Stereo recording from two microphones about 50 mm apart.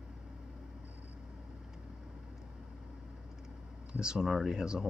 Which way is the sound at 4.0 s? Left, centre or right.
Centre.